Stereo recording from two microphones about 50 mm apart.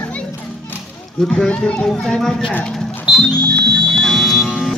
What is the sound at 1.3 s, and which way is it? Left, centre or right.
Speech, left.